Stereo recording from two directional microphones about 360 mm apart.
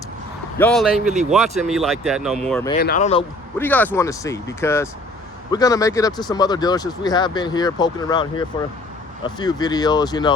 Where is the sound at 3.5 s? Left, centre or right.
Centre.